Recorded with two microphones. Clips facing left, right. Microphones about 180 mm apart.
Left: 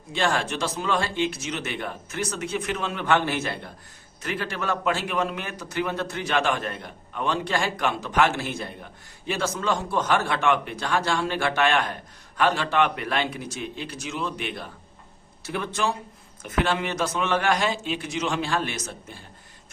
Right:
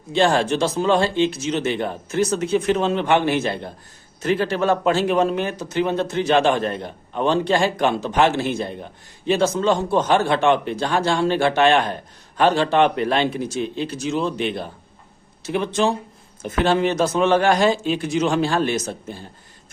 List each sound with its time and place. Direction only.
0.1 s a man's voice: 30° right (ahead or behind)